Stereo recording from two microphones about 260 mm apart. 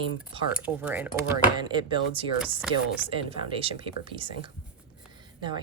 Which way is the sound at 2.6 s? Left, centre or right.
Centre.